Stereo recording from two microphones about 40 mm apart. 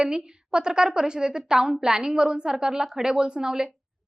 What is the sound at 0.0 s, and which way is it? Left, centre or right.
A woman's voice, right.